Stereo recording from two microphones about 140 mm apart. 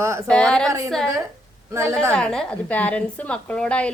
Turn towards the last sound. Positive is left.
turn(degrees=10)  # may be behind; listen again after turning